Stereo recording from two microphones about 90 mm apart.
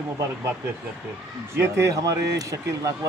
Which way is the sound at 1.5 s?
30° right (ahead or behind).